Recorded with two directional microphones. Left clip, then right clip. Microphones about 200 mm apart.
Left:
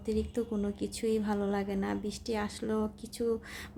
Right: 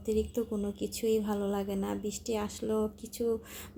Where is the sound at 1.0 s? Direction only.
10° left (ahead or behind).